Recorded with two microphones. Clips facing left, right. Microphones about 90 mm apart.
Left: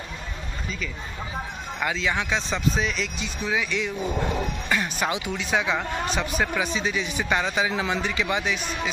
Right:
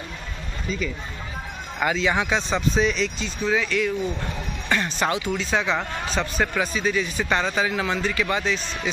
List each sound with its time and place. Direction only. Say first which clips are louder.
0.7 s speech: right 7 dB; 5° right (ahead or behind)
3.2 s speech: right 3 dB; 15° left (ahead or behind)
4.6 s music: right 4 dB; 10° left (ahead or behind)
5.4 s speech: right 1 dB; 10° left (ahead or behind)